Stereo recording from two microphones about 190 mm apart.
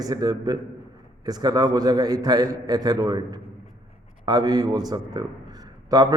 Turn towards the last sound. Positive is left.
turn(degrees=-20)  # may be behind; listen again after turning